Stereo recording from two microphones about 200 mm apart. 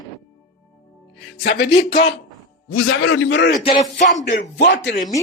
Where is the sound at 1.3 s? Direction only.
55° left (ahead or behind).